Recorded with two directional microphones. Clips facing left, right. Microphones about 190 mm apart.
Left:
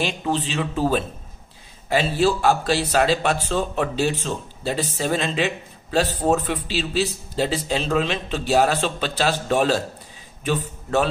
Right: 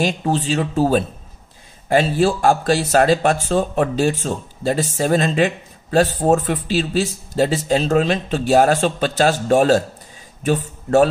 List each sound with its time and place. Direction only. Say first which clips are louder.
0.0 s a man's voice: right 4 dB; 45° right (ahead or behind)